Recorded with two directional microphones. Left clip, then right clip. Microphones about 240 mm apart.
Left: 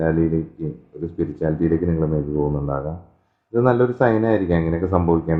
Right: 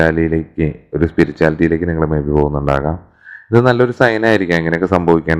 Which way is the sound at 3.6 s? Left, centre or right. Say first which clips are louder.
Right 3 dB; right.